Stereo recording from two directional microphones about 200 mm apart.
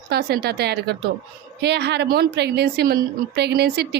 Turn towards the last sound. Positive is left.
turn(degrees=-55)  # may be behind; listen again after turning